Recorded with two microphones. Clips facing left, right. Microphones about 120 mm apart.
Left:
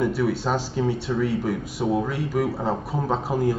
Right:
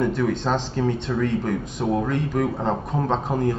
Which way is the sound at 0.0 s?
5° left (ahead or behind).